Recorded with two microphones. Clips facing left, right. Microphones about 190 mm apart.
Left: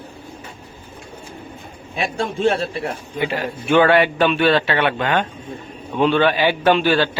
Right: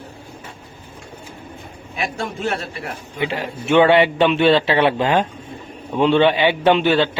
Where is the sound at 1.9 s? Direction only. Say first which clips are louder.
Left 3 dB; 25° left (ahead or behind).